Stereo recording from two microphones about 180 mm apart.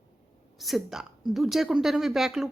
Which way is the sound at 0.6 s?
Centre (ahead or behind).